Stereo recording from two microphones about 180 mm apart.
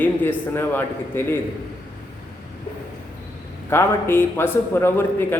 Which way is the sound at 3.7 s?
15° left (ahead or behind).